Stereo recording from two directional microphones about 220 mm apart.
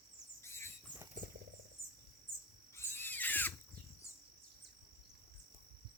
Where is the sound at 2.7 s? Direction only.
10° left (ahead or behind).